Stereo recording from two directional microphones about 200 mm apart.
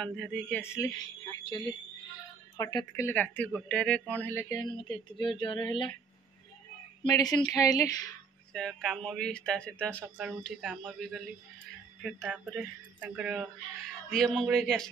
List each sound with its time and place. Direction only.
0.0 s speech: 5° left (ahead or behind); by 5.9 s 25° left (ahead or behind)
7.0 s speech: 20° left (ahead or behind)
8.5 s speech: centre (ahead or behind)